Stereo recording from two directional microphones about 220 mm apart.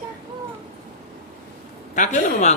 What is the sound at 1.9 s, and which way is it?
Speech, 35° left (ahead or behind).